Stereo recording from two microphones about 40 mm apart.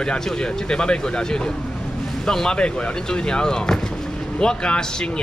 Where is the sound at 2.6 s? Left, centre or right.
Left.